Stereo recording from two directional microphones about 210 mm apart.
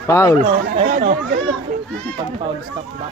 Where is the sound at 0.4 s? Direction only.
45° right (ahead or behind).